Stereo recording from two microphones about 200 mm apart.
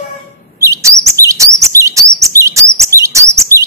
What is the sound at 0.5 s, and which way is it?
Chirp, 15° right (ahead or behind).